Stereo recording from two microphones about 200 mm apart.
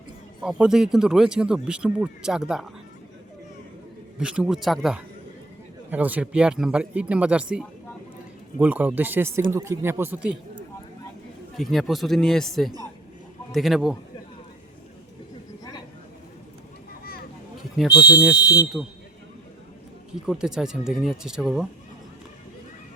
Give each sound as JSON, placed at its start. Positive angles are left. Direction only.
{"t": 0.4, "sound": "speech", "side_deg": -5}
{"t": 4.2, "sound": "speech", "side_deg": -5}
{"t": 11.5, "sound": "speech", "side_deg": 0}
{"t": 17.0, "sound": "children playing", "side_deg": 50}
{"t": 17.8, "sound": "speech", "side_deg": 0}
{"t": 20.2, "sound": "speech", "side_deg": -5}